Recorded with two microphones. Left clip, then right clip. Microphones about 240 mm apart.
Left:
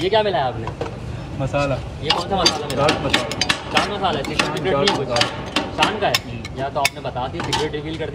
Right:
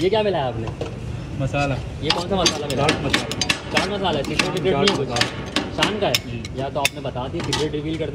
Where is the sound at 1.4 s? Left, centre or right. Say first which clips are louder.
Left 2 dB; centre.